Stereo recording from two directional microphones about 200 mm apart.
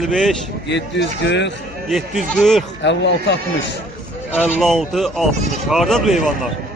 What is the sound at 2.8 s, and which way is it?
Speech, 60° left (ahead or behind).